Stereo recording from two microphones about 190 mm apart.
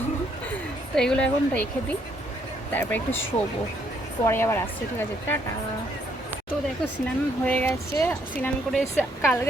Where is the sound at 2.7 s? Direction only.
10° left (ahead or behind).